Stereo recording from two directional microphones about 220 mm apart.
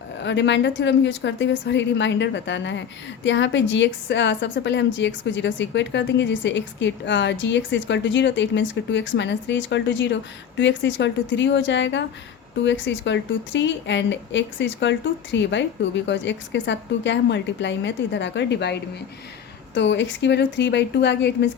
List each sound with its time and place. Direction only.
0.2 s a woman's voice: 55° left (ahead or behind)